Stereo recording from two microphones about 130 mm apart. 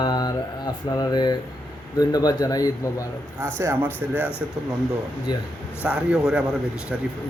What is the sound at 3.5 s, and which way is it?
Speech, 15° right (ahead or behind).